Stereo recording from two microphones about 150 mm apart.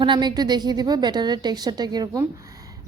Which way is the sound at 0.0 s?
30° right (ahead or behind).